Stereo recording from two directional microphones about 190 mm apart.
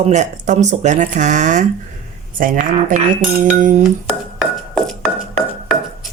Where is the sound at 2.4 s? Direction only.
45° right (ahead or behind).